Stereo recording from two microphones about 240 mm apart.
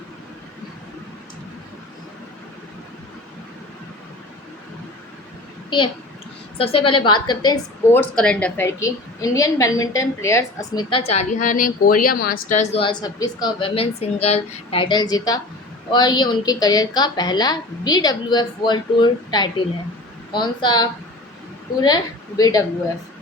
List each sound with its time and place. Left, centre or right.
6.6 s a woman's voice: left